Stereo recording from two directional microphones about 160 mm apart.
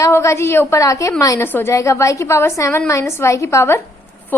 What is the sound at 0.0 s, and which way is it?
A woman's voice, 15° left (ahead or behind).